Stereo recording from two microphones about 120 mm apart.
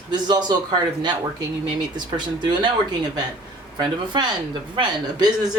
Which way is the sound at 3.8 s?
40° right (ahead or behind).